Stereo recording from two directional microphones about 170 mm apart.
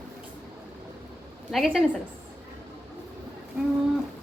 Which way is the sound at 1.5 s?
Centre (ahead or behind).